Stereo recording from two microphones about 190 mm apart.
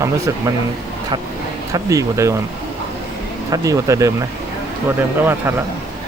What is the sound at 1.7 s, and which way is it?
Speech, 15° right (ahead or behind).